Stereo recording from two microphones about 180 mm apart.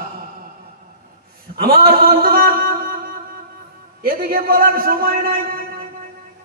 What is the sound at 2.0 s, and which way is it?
Music, 55° right (ahead or behind).